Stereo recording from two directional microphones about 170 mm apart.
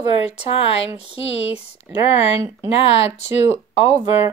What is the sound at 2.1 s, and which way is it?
Speech, 40° left (ahead or behind).